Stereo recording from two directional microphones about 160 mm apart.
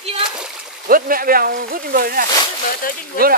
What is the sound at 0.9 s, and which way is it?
Speech, 65° right (ahead or behind).